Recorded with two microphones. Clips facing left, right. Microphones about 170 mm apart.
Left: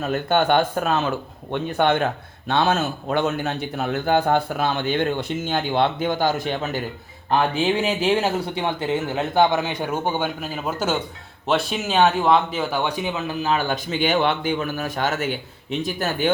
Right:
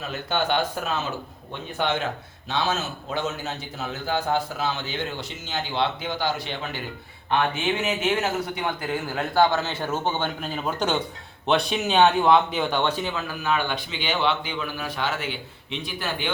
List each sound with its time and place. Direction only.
0.0 s a man's voice: 50° left (ahead or behind)